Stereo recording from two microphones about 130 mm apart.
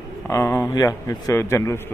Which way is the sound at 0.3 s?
20° left (ahead or behind).